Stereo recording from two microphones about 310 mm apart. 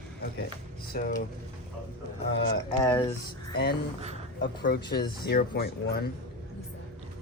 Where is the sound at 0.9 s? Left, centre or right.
Left.